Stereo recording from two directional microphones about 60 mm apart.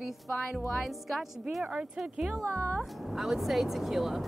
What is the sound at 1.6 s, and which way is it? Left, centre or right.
Speech, centre.